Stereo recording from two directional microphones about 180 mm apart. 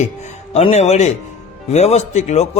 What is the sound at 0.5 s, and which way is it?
A man's voice, 35° left (ahead or behind).